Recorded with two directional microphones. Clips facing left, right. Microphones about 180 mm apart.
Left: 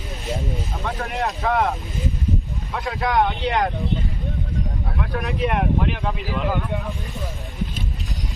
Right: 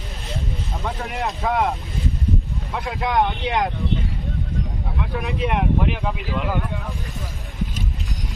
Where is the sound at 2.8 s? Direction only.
Centre (ahead or behind).